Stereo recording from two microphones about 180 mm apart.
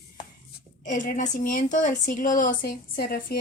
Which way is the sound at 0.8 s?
45° left (ahead or behind).